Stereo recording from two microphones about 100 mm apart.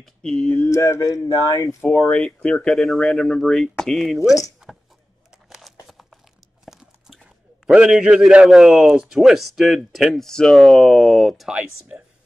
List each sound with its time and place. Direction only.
0.0 s speech: 5° left (ahead or behind)
0.6 s speech: 30° left (ahead or behind)
1.9 s speech: 10° left (ahead or behind)
4.6 s a sound: 10° right (ahead or behind)
5.5 s crumpling: centre (ahead or behind)
6.6 s horse: 5° right (ahead or behind)
7.6 s speech: 10° right (ahead or behind)